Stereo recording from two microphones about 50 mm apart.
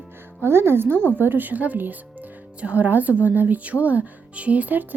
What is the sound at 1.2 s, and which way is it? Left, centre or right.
A woman's voice, right.